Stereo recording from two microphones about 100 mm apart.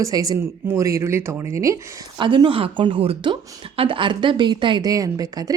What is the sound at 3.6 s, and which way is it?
Speech, 60° right (ahead or behind).